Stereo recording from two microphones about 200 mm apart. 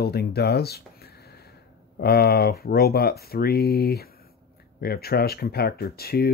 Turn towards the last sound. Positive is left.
turn(degrees=50)  # may be behind; listen again after turning